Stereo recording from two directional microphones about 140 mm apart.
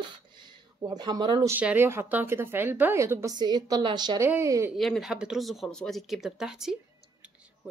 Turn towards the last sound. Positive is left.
turn(degrees=-5)  # may be behind; listen again after turning